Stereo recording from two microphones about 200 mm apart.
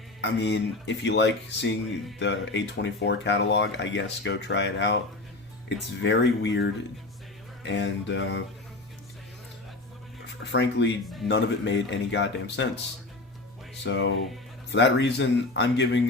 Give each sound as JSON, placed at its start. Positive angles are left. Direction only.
{"t": 0.2, "sound": "speech", "side_deg": 60}
{"t": 10.4, "sound": "speech", "side_deg": 60}
{"t": 13.8, "sound": "speech", "side_deg": 65}